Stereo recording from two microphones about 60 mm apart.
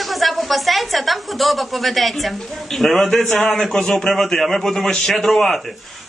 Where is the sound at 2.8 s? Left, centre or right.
Centre.